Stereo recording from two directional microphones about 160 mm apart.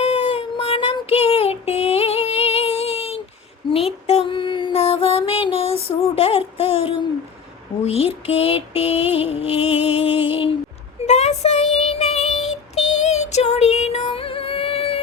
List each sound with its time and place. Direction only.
0.0 s child singing: 35° left (ahead or behind)
3.7 s music: 35° left (ahead or behind)
7.9 s female singing: 40° left (ahead or behind)
9.1 s music: 40° left (ahead or behind)
11.0 s child singing: 45° left (ahead or behind)